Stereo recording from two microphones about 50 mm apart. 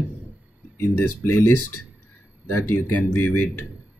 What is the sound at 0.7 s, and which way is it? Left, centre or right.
Speech, left.